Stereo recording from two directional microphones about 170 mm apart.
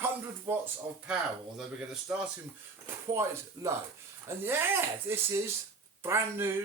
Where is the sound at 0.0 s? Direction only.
15° right (ahead or behind).